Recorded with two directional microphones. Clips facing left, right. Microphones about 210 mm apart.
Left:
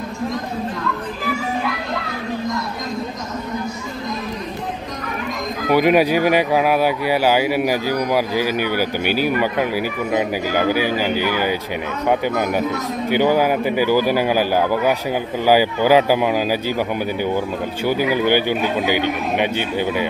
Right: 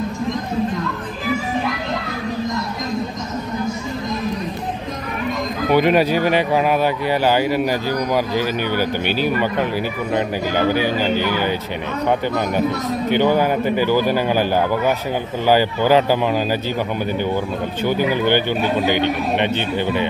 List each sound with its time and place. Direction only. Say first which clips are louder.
5.7 s speech: left 1 dB; 10° left (ahead or behind)
13.1 s speech: left 1 dB; 10° left (ahead or behind)
17.8 s speech: even; 10° left (ahead or behind)